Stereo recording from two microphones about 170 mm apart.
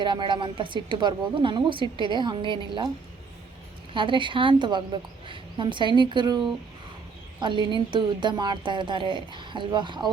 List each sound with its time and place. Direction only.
0.0 s a woman's voice: 25° right (ahead or behind)
3.9 s a woman's voice: 30° right (ahead or behind)